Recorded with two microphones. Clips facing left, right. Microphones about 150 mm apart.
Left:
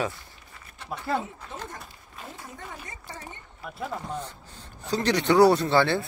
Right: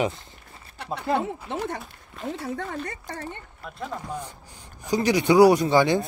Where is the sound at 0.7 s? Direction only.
65° right (ahead or behind).